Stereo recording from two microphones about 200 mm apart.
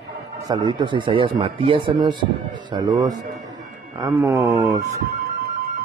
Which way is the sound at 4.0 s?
15° right (ahead or behind).